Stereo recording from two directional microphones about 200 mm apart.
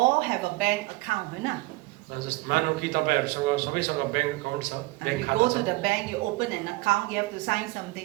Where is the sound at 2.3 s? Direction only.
50° right (ahead or behind).